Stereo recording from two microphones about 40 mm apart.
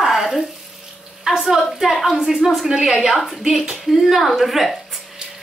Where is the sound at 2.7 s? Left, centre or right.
Centre.